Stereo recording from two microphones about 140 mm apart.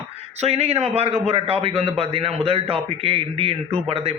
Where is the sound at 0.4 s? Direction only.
50° right (ahead or behind).